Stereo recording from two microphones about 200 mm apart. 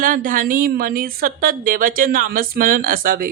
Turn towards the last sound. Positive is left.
turn(degrees=-45)  # may be behind; listen again after turning